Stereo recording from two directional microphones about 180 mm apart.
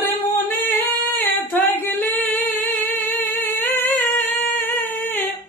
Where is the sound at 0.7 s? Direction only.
10° left (ahead or behind).